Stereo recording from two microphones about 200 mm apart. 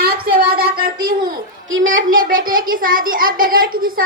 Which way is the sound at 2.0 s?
45° right (ahead or behind).